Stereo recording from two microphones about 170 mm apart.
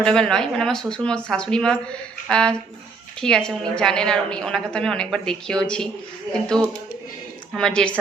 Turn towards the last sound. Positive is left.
turn(degrees=5)  # may be behind; listen again after turning